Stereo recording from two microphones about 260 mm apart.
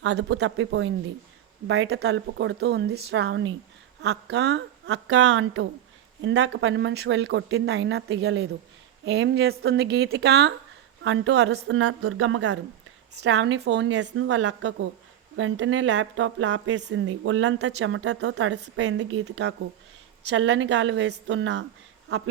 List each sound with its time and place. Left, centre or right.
0.0 s a woman's voice: right
18.6 s a woman's voice: right